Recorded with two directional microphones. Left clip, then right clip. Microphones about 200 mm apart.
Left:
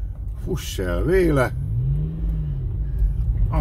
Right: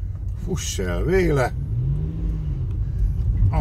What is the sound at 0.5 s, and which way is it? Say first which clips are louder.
Speech: left 1 dB; 35° left (ahead or behind).